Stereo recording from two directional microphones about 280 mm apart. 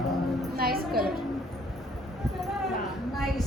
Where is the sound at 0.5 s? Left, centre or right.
Right.